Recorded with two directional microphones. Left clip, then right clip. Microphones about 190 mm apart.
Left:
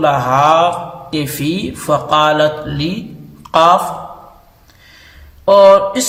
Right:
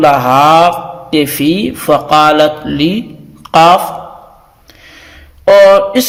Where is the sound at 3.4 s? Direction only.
30° right (ahead or behind).